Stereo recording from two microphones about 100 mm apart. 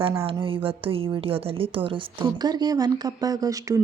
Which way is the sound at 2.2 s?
45° right (ahead or behind).